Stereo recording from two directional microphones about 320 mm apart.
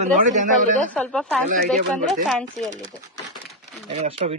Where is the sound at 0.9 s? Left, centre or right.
Centre.